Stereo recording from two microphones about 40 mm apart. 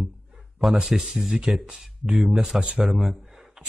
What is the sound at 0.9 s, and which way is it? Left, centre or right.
Speech, centre.